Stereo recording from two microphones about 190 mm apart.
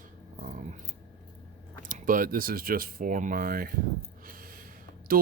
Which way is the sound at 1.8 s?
45° right (ahead or behind).